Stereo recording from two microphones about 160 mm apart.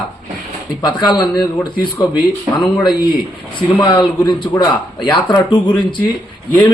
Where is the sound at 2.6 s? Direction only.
25° left (ahead or behind).